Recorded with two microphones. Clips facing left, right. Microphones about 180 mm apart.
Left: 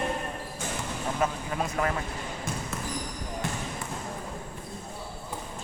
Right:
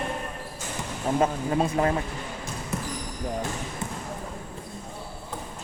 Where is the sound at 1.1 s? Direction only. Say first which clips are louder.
Right 7 dB; 30° right (ahead or behind).